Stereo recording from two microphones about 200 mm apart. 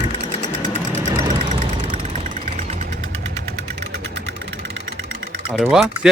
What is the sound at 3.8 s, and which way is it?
Vehicle, 60° right (ahead or behind).